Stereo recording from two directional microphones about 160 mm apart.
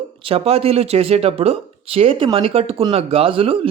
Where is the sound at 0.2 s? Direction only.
35° right (ahead or behind).